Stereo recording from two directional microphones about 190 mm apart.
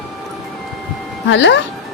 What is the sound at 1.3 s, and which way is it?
Speech, 75° left (ahead or behind).